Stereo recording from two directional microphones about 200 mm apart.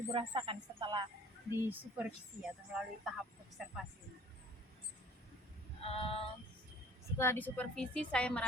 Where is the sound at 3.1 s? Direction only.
Centre (ahead or behind).